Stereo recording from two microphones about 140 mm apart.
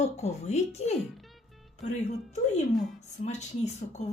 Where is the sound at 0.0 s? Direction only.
50° left (ahead or behind).